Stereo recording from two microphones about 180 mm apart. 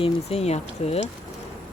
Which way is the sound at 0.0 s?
35° left (ahead or behind).